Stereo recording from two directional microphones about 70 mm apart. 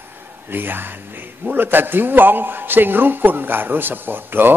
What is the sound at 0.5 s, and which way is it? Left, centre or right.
A man's voice, right.